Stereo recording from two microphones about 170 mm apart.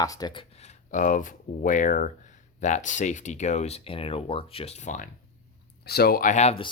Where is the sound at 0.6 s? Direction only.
50° left (ahead or behind).